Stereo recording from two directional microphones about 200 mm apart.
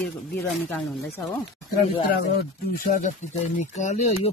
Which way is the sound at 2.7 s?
45° left (ahead or behind).